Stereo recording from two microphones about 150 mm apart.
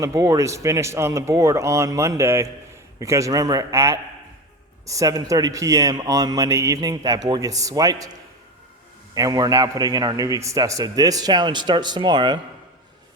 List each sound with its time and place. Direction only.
0.0 s a man's voice: 20° right (ahead or behind)
9.1 s a man's voice: 25° right (ahead or behind)